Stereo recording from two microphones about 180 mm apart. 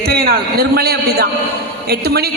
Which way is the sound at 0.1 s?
60° right (ahead or behind).